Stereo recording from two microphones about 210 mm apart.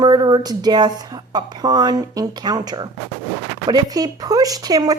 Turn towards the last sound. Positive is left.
turn(degrees=-20)  # may be behind; listen again after turning